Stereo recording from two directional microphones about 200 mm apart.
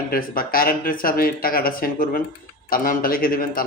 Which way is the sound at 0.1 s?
45° left (ahead or behind).